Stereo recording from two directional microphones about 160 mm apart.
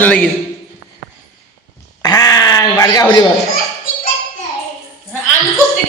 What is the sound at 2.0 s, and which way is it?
Quack, 20° left (ahead or behind).